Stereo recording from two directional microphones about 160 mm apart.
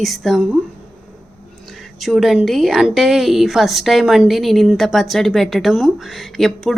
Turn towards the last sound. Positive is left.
turn(degrees=0)  # may be behind; listen again after turning